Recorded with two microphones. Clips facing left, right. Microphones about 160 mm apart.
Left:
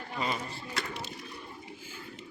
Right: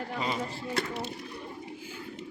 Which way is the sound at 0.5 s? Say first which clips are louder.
Right 5 dB; 60° right (ahead or behind).